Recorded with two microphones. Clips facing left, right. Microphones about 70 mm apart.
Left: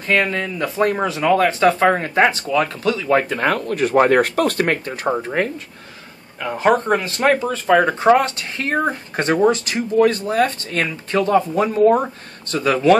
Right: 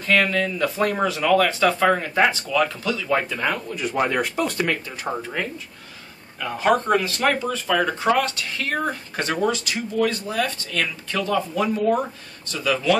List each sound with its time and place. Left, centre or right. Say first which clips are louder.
0.0 s speech: left 1 dB; left
3.5 s speech: left 8 dB; left
4.6 s speech: left 5 dB; left
5.1 s speech: left 6 dB; left